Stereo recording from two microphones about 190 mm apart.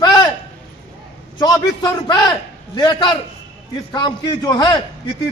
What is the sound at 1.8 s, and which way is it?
A man's voice, 20° left (ahead or behind).